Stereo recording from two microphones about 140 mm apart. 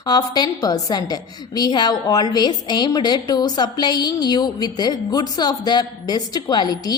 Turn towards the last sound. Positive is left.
turn(degrees=30)  # may be behind; listen again after turning